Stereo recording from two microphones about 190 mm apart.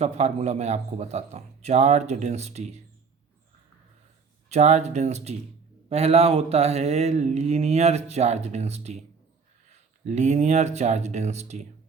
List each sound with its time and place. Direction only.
0.0 s speech: 35° right (ahead or behind)
4.4 s speech: 35° right (ahead or behind)
10.1 s speech: 35° right (ahead or behind)